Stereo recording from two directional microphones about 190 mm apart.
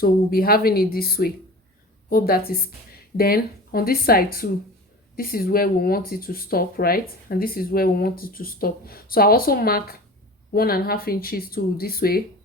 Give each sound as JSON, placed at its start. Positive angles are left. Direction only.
{"t": 0.0, "sound": "speech", "side_deg": 50}